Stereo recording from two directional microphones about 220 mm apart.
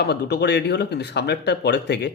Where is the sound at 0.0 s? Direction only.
50° left (ahead or behind).